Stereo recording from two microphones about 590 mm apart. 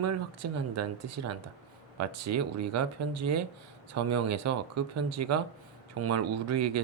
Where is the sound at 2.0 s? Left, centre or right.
Right.